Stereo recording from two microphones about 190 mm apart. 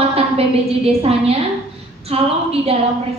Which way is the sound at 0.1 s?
30° right (ahead or behind).